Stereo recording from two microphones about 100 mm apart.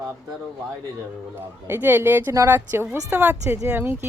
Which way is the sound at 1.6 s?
20° right (ahead or behind).